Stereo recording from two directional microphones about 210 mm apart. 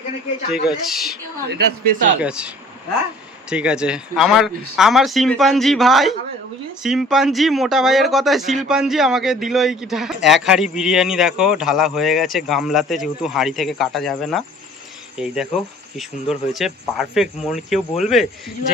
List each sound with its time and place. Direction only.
0.9 s a man's voice: centre (ahead or behind)
1.5 s speech: 45° right (ahead or behind)
2.2 s a man's voice: 5° right (ahead or behind)
3.5 s a man's voice: 5° right (ahead or behind)